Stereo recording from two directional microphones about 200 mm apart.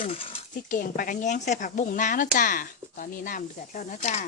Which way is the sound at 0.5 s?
40° left (ahead or behind).